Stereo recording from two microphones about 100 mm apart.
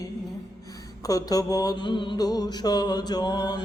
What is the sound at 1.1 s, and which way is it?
Mantra, 40° left (ahead or behind).